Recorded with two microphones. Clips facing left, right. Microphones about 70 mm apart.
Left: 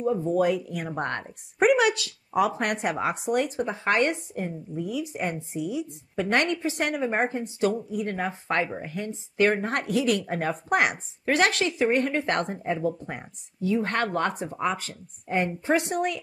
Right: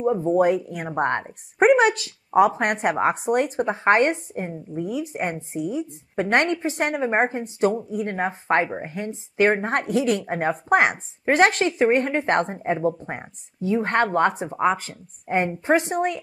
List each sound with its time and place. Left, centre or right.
0.0 s a woman's voice: right